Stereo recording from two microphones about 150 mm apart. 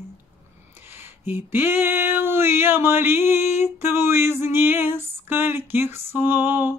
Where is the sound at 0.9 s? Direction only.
15° right (ahead or behind).